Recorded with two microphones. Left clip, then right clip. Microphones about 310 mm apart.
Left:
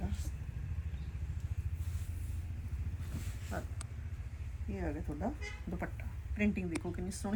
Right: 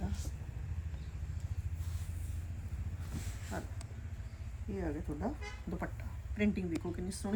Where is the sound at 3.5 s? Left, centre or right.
Centre.